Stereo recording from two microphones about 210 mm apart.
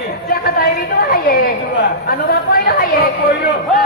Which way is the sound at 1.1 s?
45° left (ahead or behind).